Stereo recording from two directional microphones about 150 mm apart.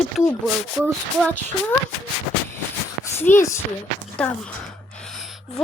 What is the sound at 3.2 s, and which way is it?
Speech, 15° left (ahead or behind).